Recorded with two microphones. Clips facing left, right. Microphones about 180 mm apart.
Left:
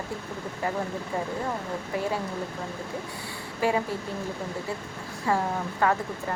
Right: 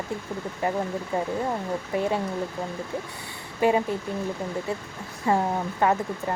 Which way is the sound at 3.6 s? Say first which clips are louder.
Right 4 dB; 20° right (ahead or behind).